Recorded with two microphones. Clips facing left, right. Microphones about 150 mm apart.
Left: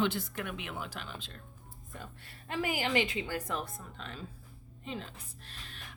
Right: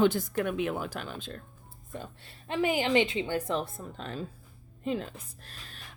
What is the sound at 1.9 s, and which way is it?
A woman's voice, 25° right (ahead or behind).